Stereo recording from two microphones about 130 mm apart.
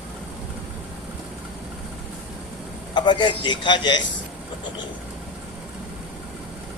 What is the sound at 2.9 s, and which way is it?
A man's voice, 40° left (ahead or behind).